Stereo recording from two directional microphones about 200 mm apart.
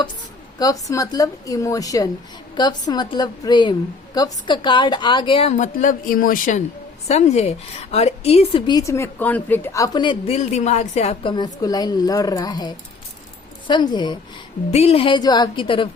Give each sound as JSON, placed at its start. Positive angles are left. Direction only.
{"t": 0.6, "sound": "a woman's voice", "side_deg": 15}